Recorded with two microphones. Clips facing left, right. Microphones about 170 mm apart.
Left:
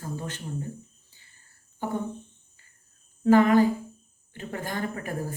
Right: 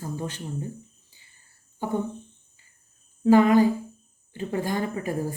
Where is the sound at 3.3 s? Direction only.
15° right (ahead or behind).